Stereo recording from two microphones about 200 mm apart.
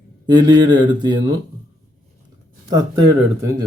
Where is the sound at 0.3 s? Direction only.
20° right (ahead or behind).